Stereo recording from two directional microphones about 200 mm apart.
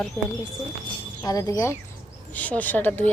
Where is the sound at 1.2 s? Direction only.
15° left (ahead or behind).